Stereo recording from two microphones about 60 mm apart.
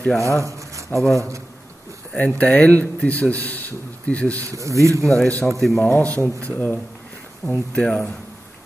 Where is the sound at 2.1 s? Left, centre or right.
Left.